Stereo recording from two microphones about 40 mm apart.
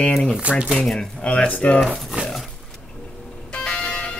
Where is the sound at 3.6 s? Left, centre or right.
Left.